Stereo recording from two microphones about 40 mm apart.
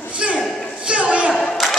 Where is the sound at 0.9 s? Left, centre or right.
Right.